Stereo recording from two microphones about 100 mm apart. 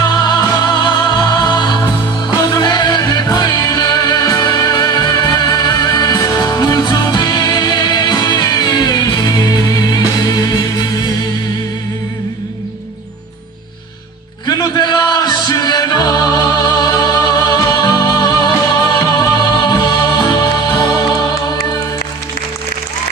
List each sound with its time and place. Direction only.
0.0 s music: 45° left (ahead or behind)
14.4 s music: 45° left (ahead or behind)